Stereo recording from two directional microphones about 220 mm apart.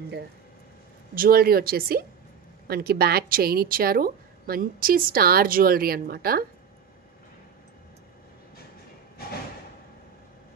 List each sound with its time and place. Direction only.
1.1 s a woman's voice: 40° right (ahead or behind)